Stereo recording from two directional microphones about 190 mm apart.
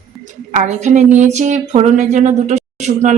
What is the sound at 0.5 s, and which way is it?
A woman's voice, 40° right (ahead or behind).